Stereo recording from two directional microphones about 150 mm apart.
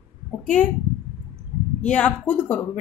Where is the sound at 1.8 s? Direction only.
10° left (ahead or behind).